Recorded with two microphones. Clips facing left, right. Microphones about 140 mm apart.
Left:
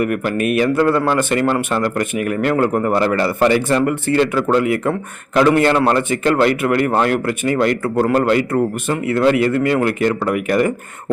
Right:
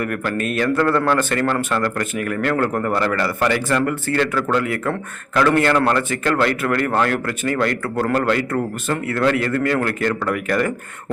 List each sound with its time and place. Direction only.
0.0 s a man's voice: 15° left (ahead or behind)